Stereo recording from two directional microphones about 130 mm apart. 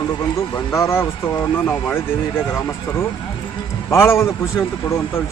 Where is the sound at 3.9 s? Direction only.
20° left (ahead or behind).